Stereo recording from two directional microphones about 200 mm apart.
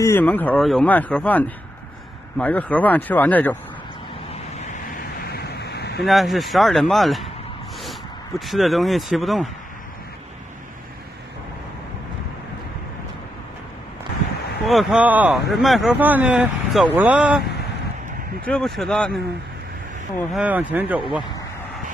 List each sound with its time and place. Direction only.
0.0 s speech: 10° left (ahead or behind)
5.2 s a sound: 50° left (ahead or behind)
6.0 s speech: centre (ahead or behind)
8.5 s speech: centre (ahead or behind)
14.6 s speech: centre (ahead or behind)
20.3 s speech: 10° right (ahead or behind)